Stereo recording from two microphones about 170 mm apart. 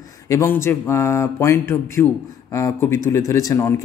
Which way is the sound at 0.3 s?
15° left (ahead or behind).